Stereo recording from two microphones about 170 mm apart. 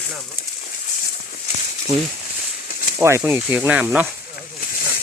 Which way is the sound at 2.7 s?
55° left (ahead or behind).